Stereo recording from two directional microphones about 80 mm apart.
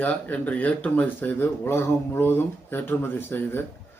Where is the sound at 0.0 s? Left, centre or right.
Centre.